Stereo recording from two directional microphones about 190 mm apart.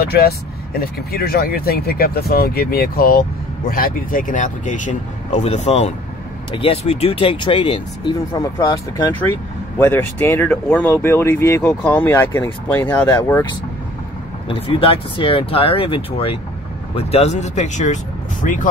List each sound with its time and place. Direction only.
0.7 s speech: 50° left (ahead or behind); by 13.5 s 15° left (ahead or behind)
14.5 s speech: 30° left (ahead or behind)